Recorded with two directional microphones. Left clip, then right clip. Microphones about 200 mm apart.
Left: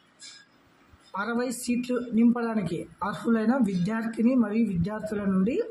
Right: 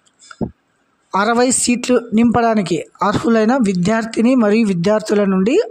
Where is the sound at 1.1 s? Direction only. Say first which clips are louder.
Right 15 dB; 55° right (ahead or behind).